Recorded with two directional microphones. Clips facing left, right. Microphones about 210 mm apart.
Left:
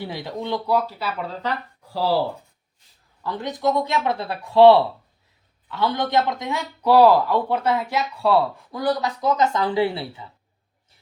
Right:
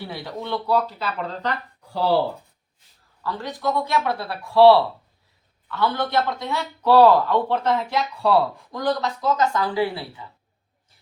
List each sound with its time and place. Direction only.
0.0 s a man's voice: 20° left (ahead or behind); by 2.2 s centre (ahead or behind)
3.2 s a man's voice: 20° left (ahead or behind)